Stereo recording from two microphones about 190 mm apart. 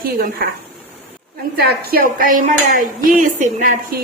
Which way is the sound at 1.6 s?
55° right (ahead or behind).